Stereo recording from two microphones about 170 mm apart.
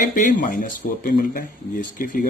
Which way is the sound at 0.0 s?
50° left (ahead or behind).